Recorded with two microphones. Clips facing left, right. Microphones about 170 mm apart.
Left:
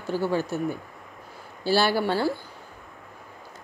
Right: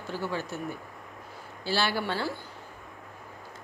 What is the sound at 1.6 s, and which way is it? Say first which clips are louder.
Speech: left 7 dB; 40° left (ahead or behind).